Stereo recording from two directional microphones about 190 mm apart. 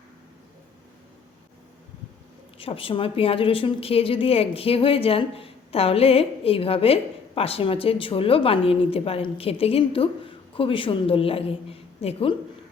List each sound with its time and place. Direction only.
2.6 s a woman's voice: 30° left (ahead or behind)